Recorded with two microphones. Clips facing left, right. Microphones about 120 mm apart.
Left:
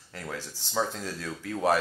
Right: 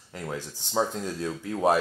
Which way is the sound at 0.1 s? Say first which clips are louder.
Right 3 dB; 20° right (ahead or behind).